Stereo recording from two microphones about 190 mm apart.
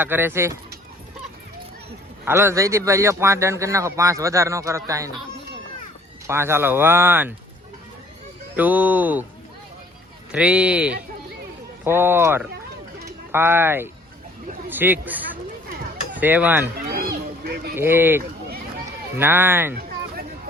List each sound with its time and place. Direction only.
0.0 s speech: 10° right (ahead or behind)
2.2 s speech: 15° right (ahead or behind)
6.2 s speech: 15° right (ahead or behind)
8.5 s speech: 10° right (ahead or behind)
10.3 s speech: 5° right (ahead or behind)
16.7 s a sound: 50° right (ahead or behind)
17.7 s speech: 10° right (ahead or behind)